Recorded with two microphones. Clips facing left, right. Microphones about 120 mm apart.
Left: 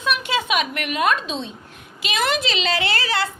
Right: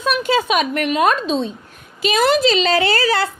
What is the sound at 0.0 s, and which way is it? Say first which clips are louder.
A woman's voice: right 5 dB; 40° right (ahead or behind).